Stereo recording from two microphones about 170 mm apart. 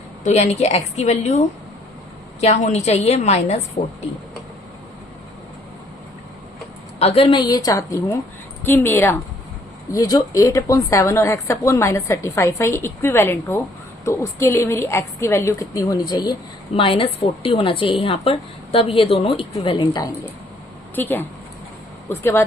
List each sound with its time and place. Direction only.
0.3 s a woman's voice: 40° left (ahead or behind)
2.4 s a woman's voice: 40° left (ahead or behind)
7.0 s a woman's voice: 35° left (ahead or behind)
20.9 s speech: 10° left (ahead or behind)